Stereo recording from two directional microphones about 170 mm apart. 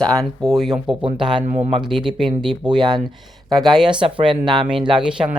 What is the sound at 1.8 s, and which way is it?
Speech, 5° right (ahead or behind).